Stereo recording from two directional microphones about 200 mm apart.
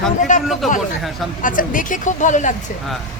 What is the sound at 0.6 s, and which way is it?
Speech, centre (ahead or behind).